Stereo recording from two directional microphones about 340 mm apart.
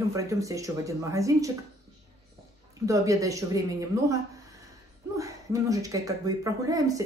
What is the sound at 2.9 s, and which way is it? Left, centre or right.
Speech, centre.